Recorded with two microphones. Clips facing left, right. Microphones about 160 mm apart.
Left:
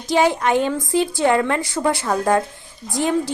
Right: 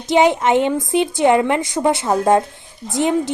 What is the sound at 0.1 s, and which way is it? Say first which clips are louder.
A woman's voice: right 3 dB; 20° right (ahead or behind).